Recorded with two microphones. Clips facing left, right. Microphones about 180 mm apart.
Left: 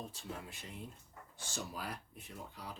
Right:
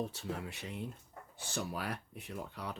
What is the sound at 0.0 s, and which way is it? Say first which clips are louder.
Speech: right 7 dB; 70° right (ahead or behind).